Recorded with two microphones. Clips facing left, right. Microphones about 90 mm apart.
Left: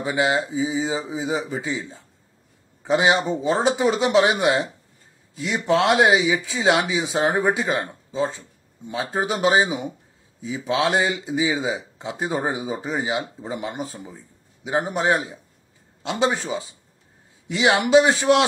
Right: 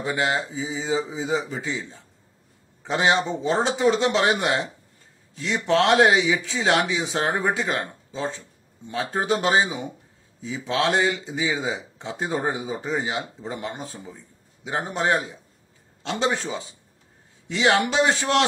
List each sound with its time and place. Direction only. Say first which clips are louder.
0.0 s a man's voice: left 3 dB; 15° left (ahead or behind)